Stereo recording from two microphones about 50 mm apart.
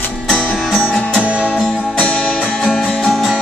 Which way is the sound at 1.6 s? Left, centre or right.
Left.